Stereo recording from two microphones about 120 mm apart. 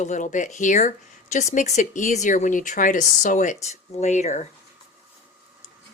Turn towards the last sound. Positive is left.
turn(degrees=75)  # may be behind; listen again after turning